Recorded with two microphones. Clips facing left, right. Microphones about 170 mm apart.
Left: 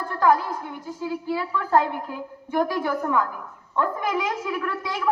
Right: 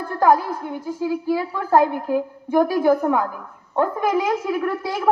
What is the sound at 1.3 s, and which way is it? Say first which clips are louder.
A woman's voice: right 3 dB; 50° right (ahead or behind).